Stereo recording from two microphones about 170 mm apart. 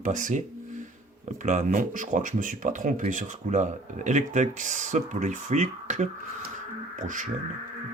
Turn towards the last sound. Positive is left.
turn(degrees=-50)  # may be behind; listen again after turning